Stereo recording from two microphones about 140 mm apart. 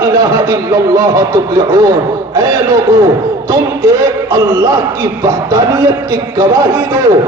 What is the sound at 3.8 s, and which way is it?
A man's voice, 75° right (ahead or behind).